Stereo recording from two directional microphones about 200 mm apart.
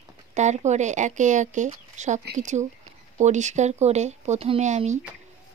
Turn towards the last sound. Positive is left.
turn(degrees=-35)  # may be behind; listen again after turning